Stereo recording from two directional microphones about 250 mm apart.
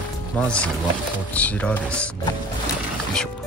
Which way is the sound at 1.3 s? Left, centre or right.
Centre.